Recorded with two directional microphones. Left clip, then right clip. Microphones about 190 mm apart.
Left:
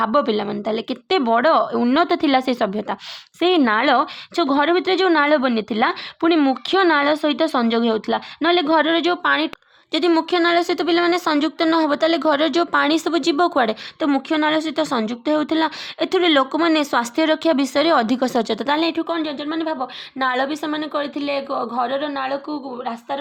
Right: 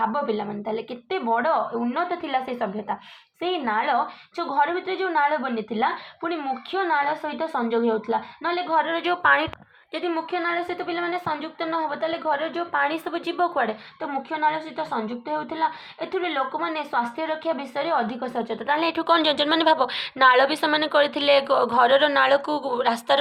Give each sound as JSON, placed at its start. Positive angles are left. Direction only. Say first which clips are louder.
{"t": 0.0, "sound": "a woman's voice", "louder": "left 6 dB", "side_deg": 65}
{"t": 9.9, "sound": "a woman's voice", "louder": "left 9 dB", "side_deg": 80}
{"t": 18.9, "sound": "a woman's voice", "louder": "right 4 dB", "side_deg": 15}
{"t": 20.1, "sound": "a woman's voice", "louder": "right 4 dB", "side_deg": 20}